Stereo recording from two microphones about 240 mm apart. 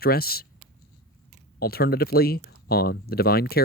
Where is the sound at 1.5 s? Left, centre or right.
Left.